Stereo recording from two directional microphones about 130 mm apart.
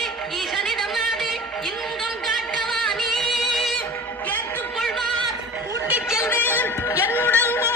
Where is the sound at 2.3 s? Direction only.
Centre (ahead or behind).